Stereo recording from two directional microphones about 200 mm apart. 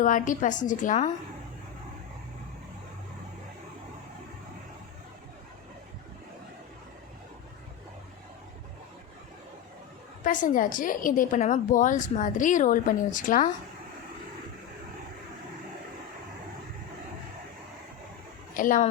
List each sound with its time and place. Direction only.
0.0 s a woman's voice: 40° left (ahead or behind)
10.2 s a woman's voice: 40° left (ahead or behind)
18.5 s speech: 40° left (ahead or behind)